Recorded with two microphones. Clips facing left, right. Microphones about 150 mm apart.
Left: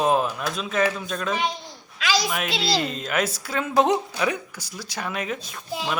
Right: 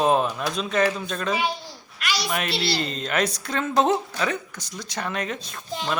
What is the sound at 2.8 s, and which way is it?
Speech, 5° left (ahead or behind).